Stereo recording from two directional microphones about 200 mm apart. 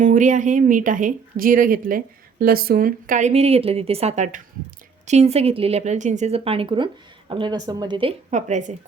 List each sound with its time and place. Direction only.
0.0 s speech: 40° right (ahead or behind)